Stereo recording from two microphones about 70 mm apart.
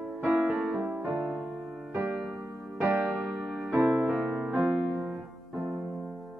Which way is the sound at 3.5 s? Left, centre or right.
Centre.